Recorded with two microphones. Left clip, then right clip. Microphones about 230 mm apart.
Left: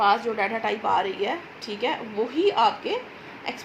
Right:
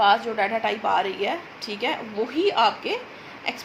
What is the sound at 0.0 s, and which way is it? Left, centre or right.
A woman's voice, right.